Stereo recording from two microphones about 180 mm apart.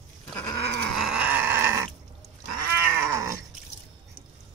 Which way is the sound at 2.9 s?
15° right (ahead or behind).